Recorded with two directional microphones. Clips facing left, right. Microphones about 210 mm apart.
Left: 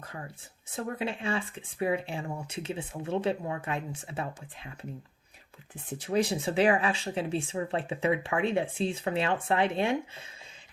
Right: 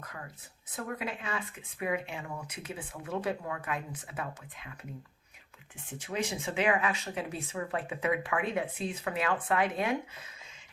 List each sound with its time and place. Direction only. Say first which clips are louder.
0.0 s a sound: left 3 dB; 30° left (ahead or behind)
0.8 s speech: left 4 dB; 30° left (ahead or behind)
5.9 s speech: left 7 dB; 35° left (ahead or behind)